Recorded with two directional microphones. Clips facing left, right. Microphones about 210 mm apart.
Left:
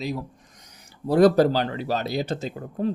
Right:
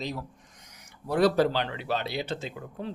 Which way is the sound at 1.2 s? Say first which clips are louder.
Left 6 dB; 45° left (ahead or behind).